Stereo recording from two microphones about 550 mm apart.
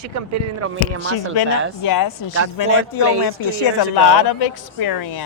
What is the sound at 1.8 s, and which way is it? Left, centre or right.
Speech, left.